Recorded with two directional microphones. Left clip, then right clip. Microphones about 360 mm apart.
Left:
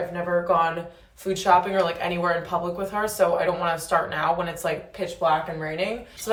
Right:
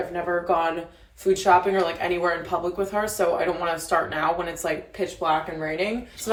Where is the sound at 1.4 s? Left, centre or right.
Centre.